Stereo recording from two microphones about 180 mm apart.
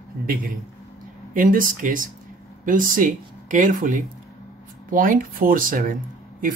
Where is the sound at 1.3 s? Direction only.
50° right (ahead or behind).